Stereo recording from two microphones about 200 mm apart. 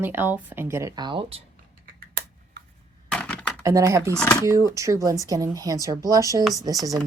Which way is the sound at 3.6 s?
15° right (ahead or behind).